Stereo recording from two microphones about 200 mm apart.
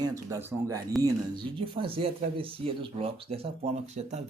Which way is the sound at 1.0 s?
25° right (ahead or behind).